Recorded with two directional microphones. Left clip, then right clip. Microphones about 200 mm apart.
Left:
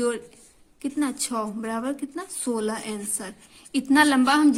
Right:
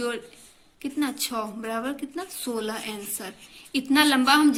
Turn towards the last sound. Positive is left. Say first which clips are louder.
# even
turn(degrees=50)  # may be behind; listen again after turning